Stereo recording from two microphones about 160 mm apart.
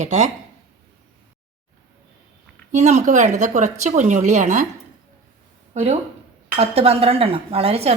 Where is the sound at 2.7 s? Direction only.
50° right (ahead or behind).